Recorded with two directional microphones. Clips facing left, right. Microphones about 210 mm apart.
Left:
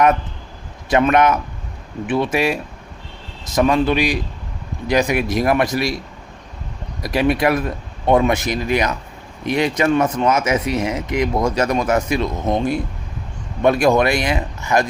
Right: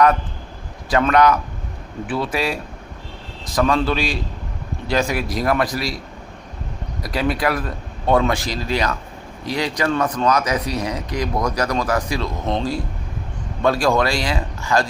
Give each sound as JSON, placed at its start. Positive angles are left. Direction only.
{"t": 0.9, "sound": "speech", "side_deg": 20}
{"t": 7.0, "sound": "speech", "side_deg": 25}